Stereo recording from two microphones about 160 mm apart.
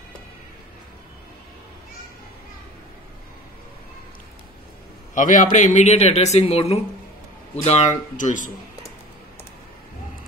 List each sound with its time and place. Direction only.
5.1 s a man's voice: 55° left (ahead or behind)